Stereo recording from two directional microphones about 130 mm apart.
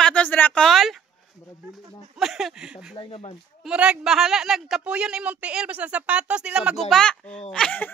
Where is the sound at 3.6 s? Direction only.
5° right (ahead or behind).